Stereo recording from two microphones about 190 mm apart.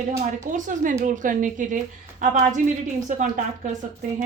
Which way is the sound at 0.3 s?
40° right (ahead or behind).